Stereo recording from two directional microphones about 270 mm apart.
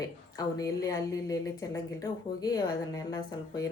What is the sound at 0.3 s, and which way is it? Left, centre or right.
A woman's voice, centre.